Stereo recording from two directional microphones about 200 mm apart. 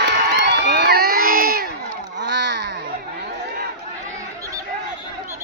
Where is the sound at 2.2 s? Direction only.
60° right (ahead or behind).